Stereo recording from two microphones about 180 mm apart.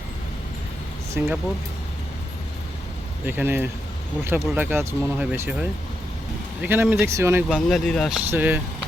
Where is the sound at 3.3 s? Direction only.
10° right (ahead or behind).